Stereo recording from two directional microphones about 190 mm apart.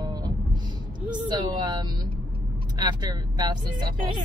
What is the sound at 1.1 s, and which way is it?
Speech, 20° right (ahead or behind).